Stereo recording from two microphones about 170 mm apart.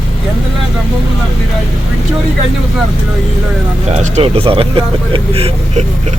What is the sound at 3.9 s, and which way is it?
Speech, 40° right (ahead or behind).